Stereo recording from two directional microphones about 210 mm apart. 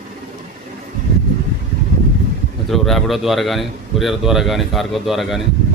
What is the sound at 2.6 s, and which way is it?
A man's voice, centre (ahead or behind).